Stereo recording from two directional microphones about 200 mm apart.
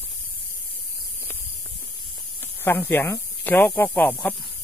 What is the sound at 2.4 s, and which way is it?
Speech, 10° left (ahead or behind).